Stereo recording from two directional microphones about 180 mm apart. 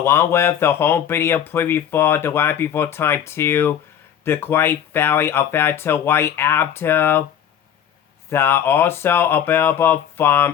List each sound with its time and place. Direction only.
0.0 s speech: 15° left (ahead or behind)
8.3 s speech: 15° left (ahead or behind)